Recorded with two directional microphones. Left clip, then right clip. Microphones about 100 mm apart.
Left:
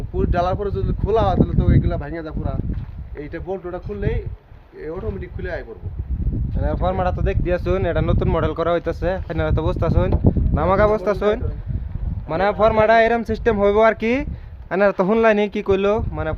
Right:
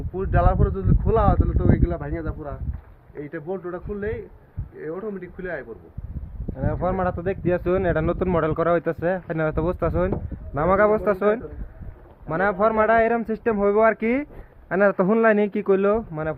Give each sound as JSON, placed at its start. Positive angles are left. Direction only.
{"t": 0.2, "sound": "speech", "side_deg": 25}
{"t": 1.5, "sound": "speech", "side_deg": 5}
{"t": 5.2, "sound": "speech", "side_deg": 30}
{"t": 6.6, "sound": "speech", "side_deg": -40}
{"t": 7.5, "sound": "speech", "side_deg": -15}
{"t": 12.3, "sound": "speech", "side_deg": 20}
{"t": 14.7, "sound": "speech", "side_deg": 10}